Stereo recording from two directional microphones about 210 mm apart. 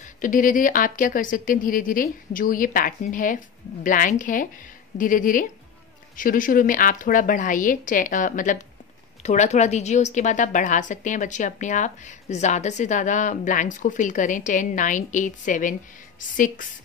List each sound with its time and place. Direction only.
0.0 s a woman's voice: 40° left (ahead or behind)